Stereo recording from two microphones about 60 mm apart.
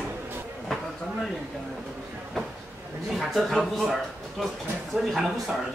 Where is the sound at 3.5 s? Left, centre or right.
Centre.